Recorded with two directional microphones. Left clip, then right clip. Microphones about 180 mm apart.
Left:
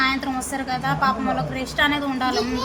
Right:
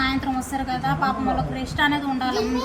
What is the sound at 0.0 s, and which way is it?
A woman's voice, 20° left (ahead or behind).